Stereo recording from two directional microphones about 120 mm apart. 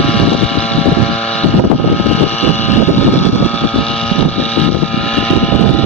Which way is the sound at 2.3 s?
65° left (ahead or behind).